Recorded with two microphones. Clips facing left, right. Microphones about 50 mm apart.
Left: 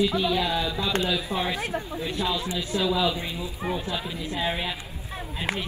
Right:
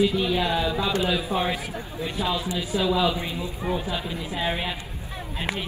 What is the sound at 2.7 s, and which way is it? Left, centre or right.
Speech, centre.